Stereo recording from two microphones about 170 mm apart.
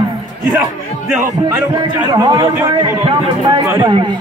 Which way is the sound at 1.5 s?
25° right (ahead or behind).